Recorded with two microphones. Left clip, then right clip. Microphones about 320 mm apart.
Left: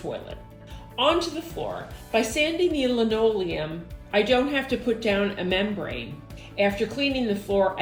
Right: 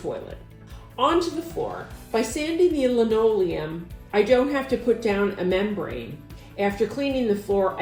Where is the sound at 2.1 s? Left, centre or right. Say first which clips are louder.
Left 2 dB; left.